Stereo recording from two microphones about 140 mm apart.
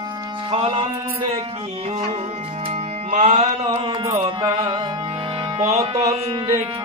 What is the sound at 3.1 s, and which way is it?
Mantra, 55° right (ahead or behind).